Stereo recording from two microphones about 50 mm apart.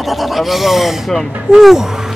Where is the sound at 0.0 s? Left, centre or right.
Centre.